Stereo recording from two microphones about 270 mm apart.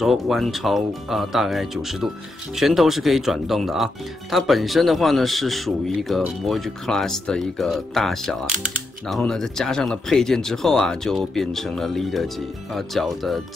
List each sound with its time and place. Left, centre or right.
0.0 s speech: centre